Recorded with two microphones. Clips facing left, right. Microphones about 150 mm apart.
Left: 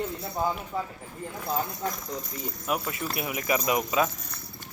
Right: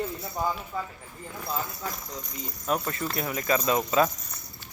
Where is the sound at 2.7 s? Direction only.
10° left (ahead or behind).